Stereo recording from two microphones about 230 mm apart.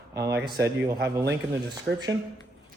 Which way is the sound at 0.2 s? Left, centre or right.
Centre.